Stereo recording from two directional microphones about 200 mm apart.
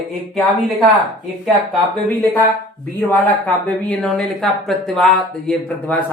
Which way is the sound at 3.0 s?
5° left (ahead or behind).